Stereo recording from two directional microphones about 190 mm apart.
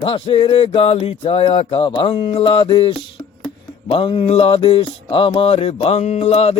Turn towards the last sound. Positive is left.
turn(degrees=35)  # may be behind; listen again after turning